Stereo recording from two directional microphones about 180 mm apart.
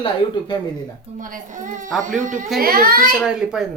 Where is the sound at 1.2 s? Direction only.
45° right (ahead or behind).